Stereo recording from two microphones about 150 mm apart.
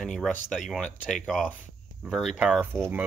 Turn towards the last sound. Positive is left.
turn(degrees=-15)  # may be behind; listen again after turning